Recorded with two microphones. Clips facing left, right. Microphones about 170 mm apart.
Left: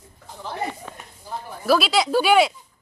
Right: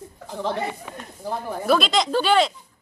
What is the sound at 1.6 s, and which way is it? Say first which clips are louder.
Speech: left 1 dB; 5° left (ahead or behind).